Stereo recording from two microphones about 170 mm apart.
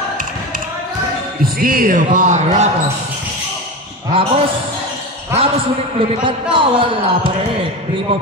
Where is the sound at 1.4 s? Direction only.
60° right (ahead or behind); by 2.7 s 40° right (ahead or behind).